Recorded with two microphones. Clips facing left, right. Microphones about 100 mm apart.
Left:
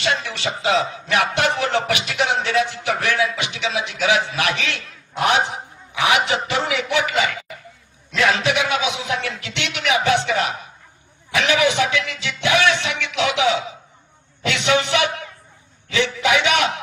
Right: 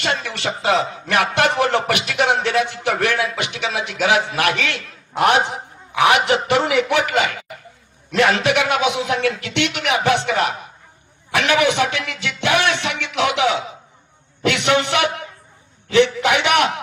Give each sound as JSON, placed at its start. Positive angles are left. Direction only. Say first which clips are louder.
{"t": 0.0, "sound": "a man's voice", "louder": "even", "side_deg": -50}